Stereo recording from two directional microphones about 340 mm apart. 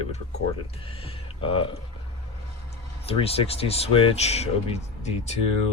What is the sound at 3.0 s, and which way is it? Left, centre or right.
Speech, centre.